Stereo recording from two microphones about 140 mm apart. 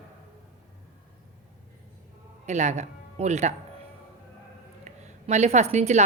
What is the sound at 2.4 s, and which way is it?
Speech, 55° right (ahead or behind).